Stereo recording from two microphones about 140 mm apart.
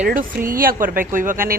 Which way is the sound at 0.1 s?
80° right.